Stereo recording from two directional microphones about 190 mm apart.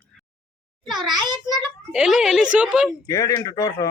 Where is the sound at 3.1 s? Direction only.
20° left (ahead or behind).